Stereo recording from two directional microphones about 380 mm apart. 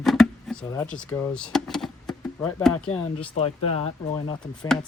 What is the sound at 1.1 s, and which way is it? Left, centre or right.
Speech, centre.